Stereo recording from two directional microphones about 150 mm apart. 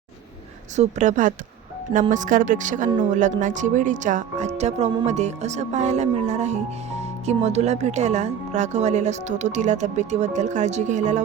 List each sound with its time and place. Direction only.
0.8 s speech: 55° right (ahead or behind)